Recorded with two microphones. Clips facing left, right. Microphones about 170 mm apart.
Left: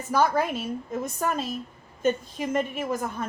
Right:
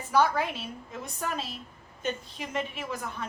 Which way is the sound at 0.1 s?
45° left (ahead or behind).